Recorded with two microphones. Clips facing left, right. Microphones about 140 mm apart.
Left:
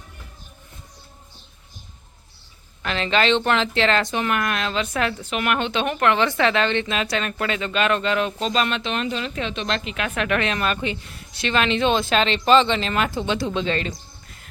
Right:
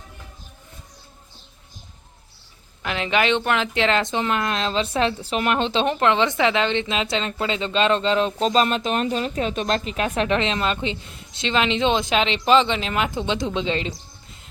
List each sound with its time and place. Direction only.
2.8 s speech: 15° right (ahead or behind); by 10.1 s 35° right (ahead or behind)
10.2 s a woman's voice: 25° right (ahead or behind)
13.9 s music: 25° right (ahead or behind)